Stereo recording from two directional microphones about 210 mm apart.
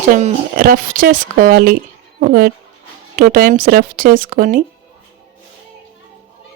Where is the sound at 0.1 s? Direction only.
40° right (ahead or behind).